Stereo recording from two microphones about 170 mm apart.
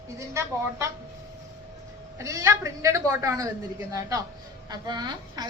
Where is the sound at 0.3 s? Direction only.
15° right (ahead or behind).